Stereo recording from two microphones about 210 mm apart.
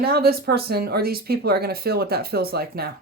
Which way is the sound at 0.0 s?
45° right (ahead or behind).